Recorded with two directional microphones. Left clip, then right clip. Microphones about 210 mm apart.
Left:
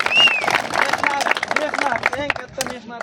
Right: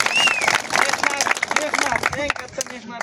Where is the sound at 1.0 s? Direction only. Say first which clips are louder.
Left 1 dB; 50° right (ahead or behind).